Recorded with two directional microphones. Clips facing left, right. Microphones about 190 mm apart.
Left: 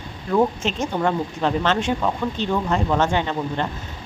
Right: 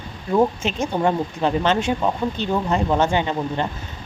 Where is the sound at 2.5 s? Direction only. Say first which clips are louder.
Right 1 dB; 15° right (ahead or behind).